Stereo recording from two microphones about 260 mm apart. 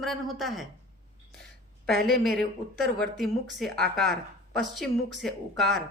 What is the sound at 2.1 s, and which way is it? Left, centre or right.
Speech, centre.